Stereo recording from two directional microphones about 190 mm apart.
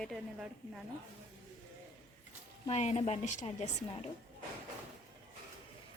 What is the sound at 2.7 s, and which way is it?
Speech, 35° left (ahead or behind).